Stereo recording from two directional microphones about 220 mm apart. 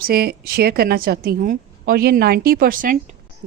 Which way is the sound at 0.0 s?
45° right (ahead or behind).